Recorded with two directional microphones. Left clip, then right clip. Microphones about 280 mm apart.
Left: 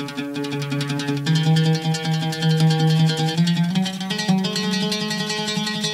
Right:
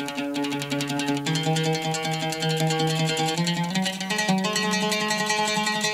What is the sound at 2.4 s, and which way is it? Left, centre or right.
Music, left.